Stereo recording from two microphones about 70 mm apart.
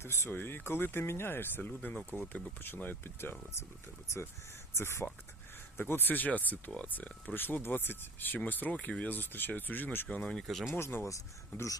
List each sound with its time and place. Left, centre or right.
0.0 s speech: left
4.7 s speech: left
8.7 s speech: centre
9.0 s speech: left
10.4 s speech: centre
10.7 s speech: left